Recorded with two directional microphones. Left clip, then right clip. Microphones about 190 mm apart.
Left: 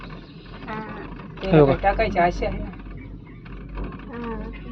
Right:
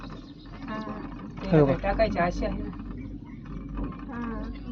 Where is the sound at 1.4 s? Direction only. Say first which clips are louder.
Left 6 dB; 5° left (ahead or behind).